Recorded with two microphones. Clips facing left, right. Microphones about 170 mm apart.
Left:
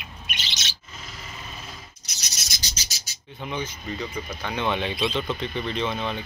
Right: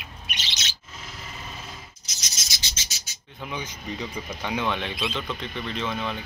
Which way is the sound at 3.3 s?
Centre (ahead or behind).